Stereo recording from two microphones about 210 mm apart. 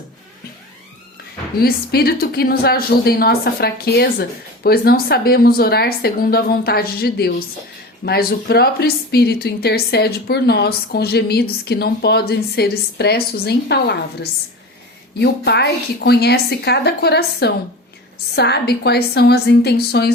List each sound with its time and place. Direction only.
1.5 s a woman's voice: 45° left (ahead or behind)